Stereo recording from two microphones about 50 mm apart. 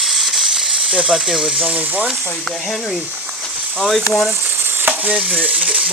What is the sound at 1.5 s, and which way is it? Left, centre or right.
Speech, right.